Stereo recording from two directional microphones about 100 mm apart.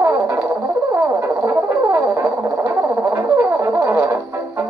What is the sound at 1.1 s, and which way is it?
Brass instrument, 25° right (ahead or behind).